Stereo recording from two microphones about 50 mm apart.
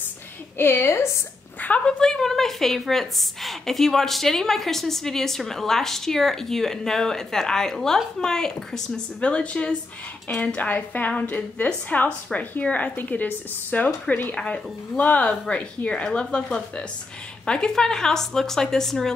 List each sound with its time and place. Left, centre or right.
0.6 s a woman's voice: left
1.9 s a woman's voice: centre
9.2 s a woman's voice: left
14.3 s a woman's voice: centre
15.0 s a woman's voice: left
15.4 s a woman's voice: left